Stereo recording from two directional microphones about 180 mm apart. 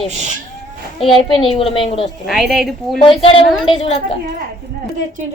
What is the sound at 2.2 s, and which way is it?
Speech, centre (ahead or behind).